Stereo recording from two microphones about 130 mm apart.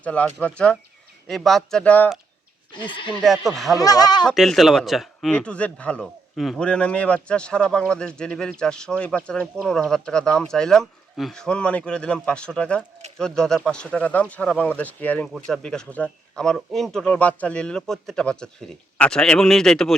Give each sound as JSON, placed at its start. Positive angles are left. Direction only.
{"t": 0.0, "sound": "speech", "side_deg": 10}
{"t": 2.7, "sound": "speech", "side_deg": 40}
{"t": 3.1, "sound": "speech", "side_deg": 0}
{"t": 3.8, "sound": "speech", "side_deg": 30}
{"t": 4.3, "sound": "speech", "side_deg": 0}